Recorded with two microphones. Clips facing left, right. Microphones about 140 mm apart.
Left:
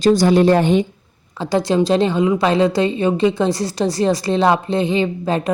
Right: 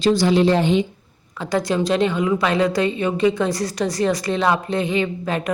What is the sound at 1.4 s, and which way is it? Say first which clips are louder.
A woman's voice: left 4 dB; 30° left (ahead or behind).